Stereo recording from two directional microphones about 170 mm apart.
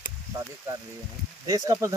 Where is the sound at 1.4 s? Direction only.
20° right (ahead or behind).